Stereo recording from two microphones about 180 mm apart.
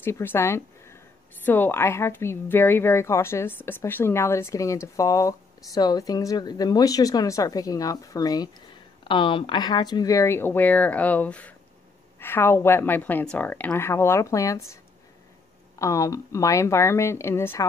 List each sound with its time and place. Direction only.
0.0 s a woman's voice: 10° left (ahead or behind)
15.8 s a woman's voice: 20° left (ahead or behind)